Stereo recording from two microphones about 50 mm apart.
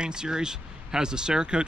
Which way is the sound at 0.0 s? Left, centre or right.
Centre.